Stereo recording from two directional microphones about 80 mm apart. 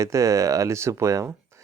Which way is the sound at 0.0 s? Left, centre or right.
Right.